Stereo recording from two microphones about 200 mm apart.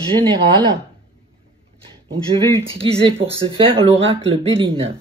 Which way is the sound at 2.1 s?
25° right (ahead or behind).